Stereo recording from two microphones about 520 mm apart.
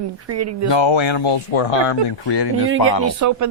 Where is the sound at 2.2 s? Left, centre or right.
Left.